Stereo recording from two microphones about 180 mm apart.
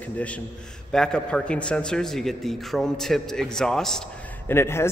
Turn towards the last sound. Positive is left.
turn(degrees=15)  # may be behind; listen again after turning